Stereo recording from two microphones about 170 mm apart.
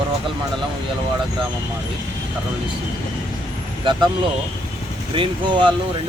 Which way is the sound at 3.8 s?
30° right (ahead or behind).